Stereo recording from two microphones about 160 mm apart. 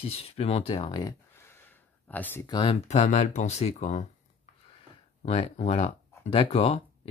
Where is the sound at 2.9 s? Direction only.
45° left (ahead or behind).